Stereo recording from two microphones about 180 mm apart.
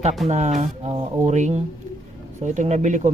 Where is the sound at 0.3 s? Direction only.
40° right (ahead or behind).